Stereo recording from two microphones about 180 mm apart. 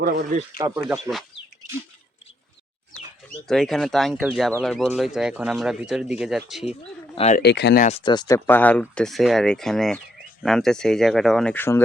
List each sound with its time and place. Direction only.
0.0 s speech: 60° right (ahead or behind)
0.6 s speech: 20° right (ahead or behind)
3.2 s speech: centre (ahead or behind)
7.3 s speech: 70° left (ahead or behind)
7.8 s speech: 40° left (ahead or behind)
8.0 s speech: 25° left (ahead or behind)
8.4 s speech: 10° left (ahead or behind)